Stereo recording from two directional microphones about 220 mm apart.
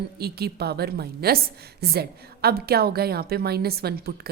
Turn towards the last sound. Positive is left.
turn(degrees=-45)  # may be behind; listen again after turning